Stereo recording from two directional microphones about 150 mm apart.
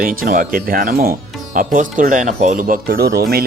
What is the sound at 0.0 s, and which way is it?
Speech, 70° right (ahead or behind).